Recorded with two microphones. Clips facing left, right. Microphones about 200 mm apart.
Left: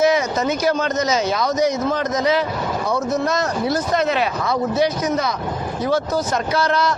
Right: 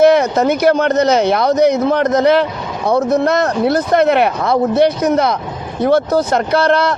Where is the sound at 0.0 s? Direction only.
60° right (ahead or behind).